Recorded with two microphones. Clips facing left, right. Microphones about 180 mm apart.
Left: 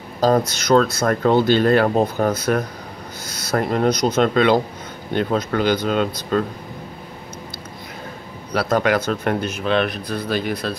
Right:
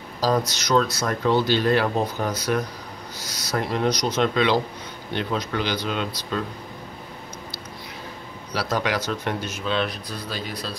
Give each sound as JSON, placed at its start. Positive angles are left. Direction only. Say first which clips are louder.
{"t": 0.5, "sound": "speech", "louder": "left 5 dB", "side_deg": 55}
{"t": 8.5, "sound": "speech", "louder": "left 6 dB", "side_deg": 55}